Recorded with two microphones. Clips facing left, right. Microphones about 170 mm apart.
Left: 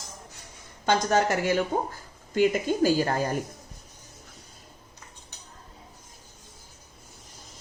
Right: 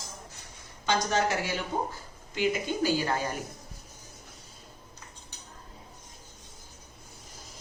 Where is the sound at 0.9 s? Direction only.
50° left (ahead or behind).